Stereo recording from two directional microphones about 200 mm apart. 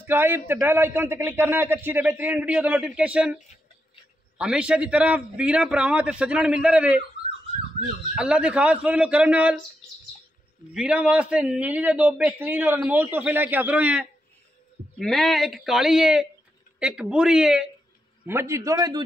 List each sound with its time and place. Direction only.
0.0 s a man's voice: 10° right (ahead or behind)
4.4 s a man's voice: 5° right (ahead or behind)
8.1 s a man's voice: 5° right (ahead or behind)
10.7 s a man's voice: 5° right (ahead or behind)